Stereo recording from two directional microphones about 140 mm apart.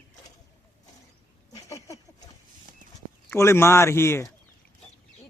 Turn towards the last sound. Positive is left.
turn(degrees=20)  # may be behind; listen again after turning